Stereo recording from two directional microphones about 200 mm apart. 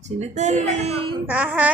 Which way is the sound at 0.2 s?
35° right (ahead or behind).